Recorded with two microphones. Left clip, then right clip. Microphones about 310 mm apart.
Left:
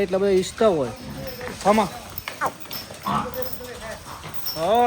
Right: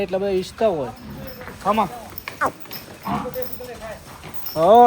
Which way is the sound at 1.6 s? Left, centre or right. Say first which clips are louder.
Left 1 dB; centre.